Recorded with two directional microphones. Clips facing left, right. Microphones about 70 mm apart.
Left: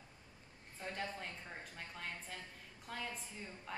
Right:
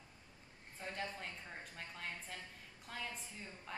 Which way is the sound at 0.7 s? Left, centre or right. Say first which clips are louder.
Left 1 dB; centre.